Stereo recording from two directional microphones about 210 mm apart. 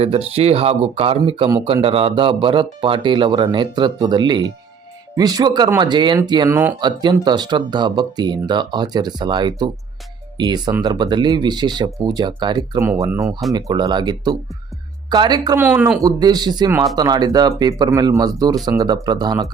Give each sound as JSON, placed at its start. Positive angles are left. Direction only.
{"t": 0.0, "sound": "speech", "side_deg": -30}
{"t": 15.6, "sound": "speech", "side_deg": -10}